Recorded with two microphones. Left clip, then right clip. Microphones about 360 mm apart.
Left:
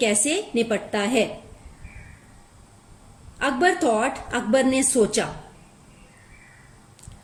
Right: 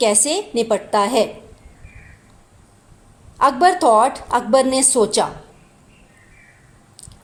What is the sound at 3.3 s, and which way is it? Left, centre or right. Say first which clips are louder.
A woman's voice: right 7 dB; centre.